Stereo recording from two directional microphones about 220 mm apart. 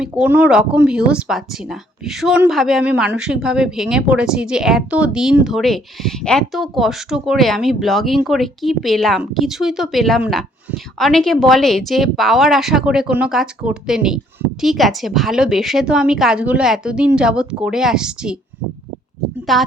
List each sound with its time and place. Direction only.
0.0 s speech: 5° right (ahead or behind)
19.5 s speech: centre (ahead or behind)